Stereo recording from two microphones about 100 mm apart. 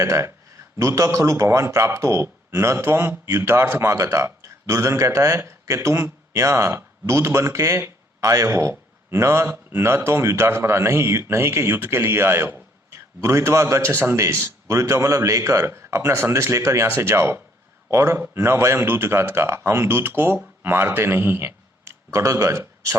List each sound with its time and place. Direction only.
0.0 s speech: 30° right (ahead or behind)